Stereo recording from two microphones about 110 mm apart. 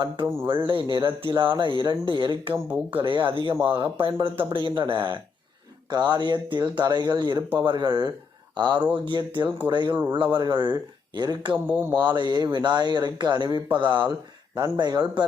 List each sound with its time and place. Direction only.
0.4 s speech: 50° right (ahead or behind)
11.5 s speech: 15° right (ahead or behind)
12.0 s speech: 40° right (ahead or behind)